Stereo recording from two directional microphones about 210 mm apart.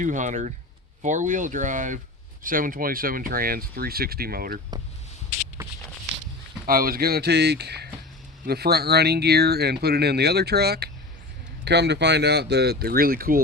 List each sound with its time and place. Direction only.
0.0 s speech: 35° right (ahead or behind)
6.7 s speech: 45° right (ahead or behind)